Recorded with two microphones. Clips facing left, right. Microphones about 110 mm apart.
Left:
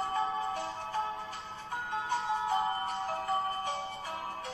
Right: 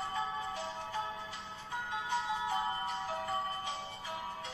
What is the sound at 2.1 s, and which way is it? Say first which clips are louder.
Music: left 4 dB; 45° left (ahead or behind).